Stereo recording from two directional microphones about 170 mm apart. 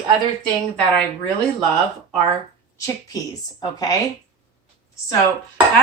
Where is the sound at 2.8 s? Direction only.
20° left (ahead or behind).